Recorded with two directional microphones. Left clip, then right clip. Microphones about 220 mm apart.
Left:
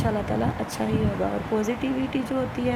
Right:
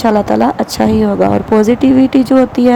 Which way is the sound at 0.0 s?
35° right (ahead or behind).